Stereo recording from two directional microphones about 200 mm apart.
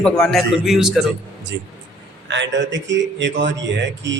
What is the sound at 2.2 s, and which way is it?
A man's voice, 65° right (ahead or behind).